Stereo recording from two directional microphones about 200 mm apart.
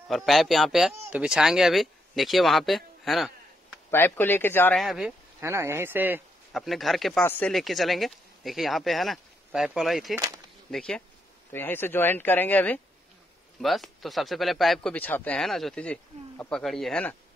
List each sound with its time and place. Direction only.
0.1 s speech: centre (ahead or behind)
3.9 s speech: 10° left (ahead or behind)
5.4 s speech: 15° right (ahead or behind)
10.1 s speech: 20° right (ahead or behind)
10.7 s speech: 5° left (ahead or behind)